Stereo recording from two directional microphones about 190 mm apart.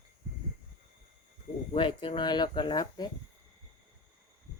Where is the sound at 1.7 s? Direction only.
25° left (ahead or behind).